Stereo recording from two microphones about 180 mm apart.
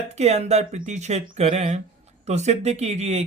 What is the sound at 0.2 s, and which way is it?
Speech, 35° right (ahead or behind).